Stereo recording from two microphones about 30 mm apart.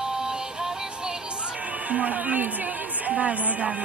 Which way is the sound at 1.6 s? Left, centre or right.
Right.